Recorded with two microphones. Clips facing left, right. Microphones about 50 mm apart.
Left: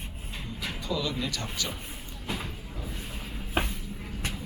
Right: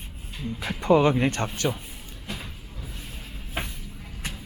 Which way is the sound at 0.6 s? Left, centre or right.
Right.